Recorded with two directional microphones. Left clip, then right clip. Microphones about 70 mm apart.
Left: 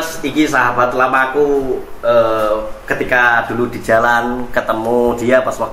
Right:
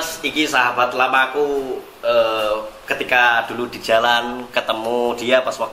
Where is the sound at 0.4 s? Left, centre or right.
Right.